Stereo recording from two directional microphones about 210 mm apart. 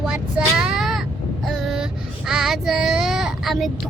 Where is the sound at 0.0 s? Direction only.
5° right (ahead or behind).